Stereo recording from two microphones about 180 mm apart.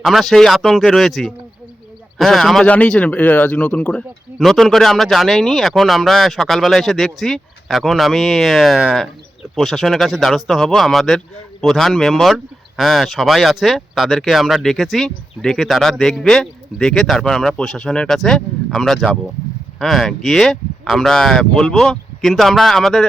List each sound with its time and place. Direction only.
0.0 s speech: centre (ahead or behind)